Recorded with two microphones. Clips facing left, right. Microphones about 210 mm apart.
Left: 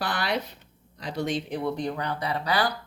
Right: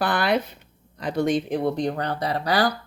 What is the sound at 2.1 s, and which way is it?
Speech, 40° right (ahead or behind).